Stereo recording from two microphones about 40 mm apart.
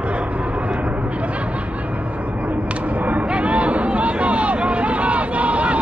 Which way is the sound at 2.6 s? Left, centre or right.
Right.